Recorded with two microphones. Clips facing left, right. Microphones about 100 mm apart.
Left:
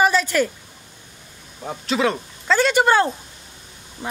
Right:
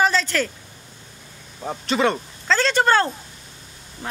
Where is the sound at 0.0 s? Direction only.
15° left (ahead or behind).